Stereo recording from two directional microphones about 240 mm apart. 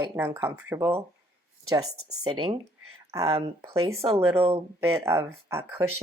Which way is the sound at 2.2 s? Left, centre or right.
Centre.